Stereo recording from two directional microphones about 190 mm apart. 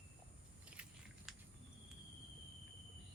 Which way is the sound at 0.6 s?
5° right (ahead or behind).